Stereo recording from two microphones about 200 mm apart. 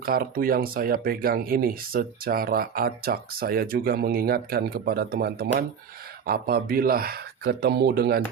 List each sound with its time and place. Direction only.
0.0 s speech: 45° right (ahead or behind)